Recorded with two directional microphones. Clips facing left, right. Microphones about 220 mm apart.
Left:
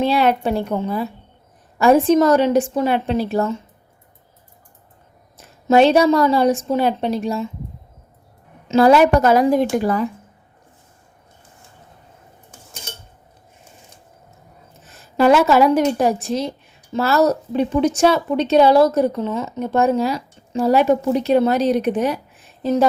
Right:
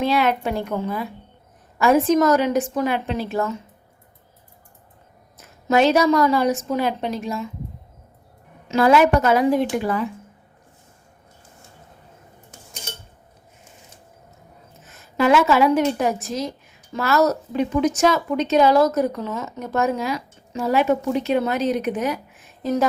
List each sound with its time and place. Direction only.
0.0 s a woman's voice: 30° left (ahead or behind)
5.4 s a woman's voice: 30° left (ahead or behind)
8.6 s a woman's voice: 30° left (ahead or behind)
14.8 s a woman's voice: 40° left (ahead or behind)